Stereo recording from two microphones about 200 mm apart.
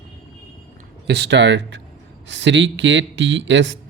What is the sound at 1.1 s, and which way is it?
Speech, 60° right (ahead or behind).